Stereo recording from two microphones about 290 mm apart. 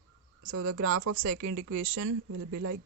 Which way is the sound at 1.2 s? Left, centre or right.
Right.